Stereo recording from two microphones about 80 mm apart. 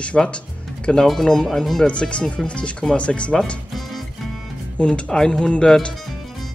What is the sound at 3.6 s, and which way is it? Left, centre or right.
Music, centre.